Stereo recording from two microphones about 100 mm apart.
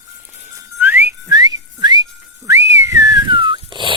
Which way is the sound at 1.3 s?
40° right (ahead or behind).